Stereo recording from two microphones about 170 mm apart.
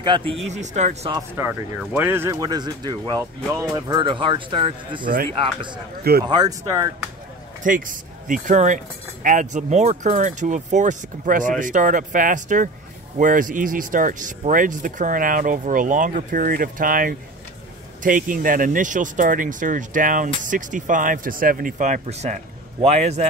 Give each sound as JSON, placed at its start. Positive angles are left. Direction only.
{"t": 0.0, "sound": "speech", "side_deg": -30}
{"t": 0.5, "sound": "speech", "side_deg": -45}
{"t": 1.3, "sound": "speech", "side_deg": -10}
{"t": 6.2, "sound": "speech", "side_deg": -25}
{"t": 7.6, "sound": "speech", "side_deg": -50}